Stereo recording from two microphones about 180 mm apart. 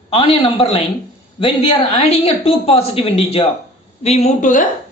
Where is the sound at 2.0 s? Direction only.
35° left (ahead or behind).